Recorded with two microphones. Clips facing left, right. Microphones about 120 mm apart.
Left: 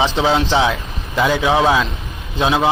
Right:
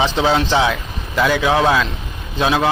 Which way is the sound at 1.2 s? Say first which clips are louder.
Even; 20° left (ahead or behind).